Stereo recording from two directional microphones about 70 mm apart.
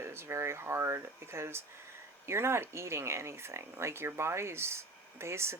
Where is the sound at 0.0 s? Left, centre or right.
Right.